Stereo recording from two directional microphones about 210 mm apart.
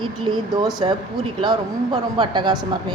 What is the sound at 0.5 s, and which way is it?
Speech, 20° right (ahead or behind).